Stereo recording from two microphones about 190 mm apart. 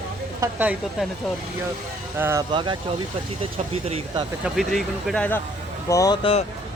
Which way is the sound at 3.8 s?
35° right (ahead or behind).